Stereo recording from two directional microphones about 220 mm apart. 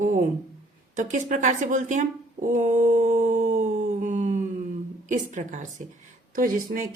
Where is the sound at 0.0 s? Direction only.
35° right (ahead or behind).